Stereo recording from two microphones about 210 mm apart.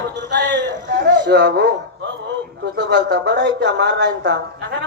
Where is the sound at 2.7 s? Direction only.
55° right (ahead or behind).